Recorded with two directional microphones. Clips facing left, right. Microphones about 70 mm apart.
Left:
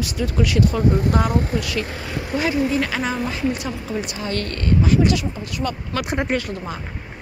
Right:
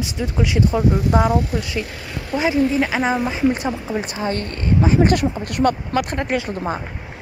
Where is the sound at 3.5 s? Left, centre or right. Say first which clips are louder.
Right 4 dB; right.